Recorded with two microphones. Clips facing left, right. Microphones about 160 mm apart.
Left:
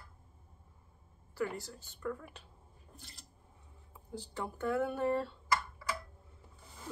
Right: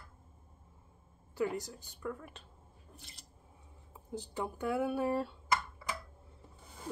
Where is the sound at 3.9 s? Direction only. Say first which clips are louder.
Right 3 dB; 20° right (ahead or behind).